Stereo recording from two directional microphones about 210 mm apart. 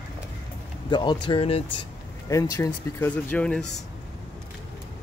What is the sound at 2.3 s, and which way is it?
Speech, 15° left (ahead or behind).